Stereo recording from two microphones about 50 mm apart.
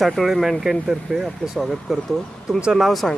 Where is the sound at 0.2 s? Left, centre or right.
Centre.